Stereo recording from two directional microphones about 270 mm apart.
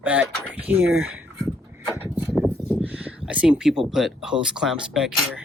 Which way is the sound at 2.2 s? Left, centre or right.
Centre.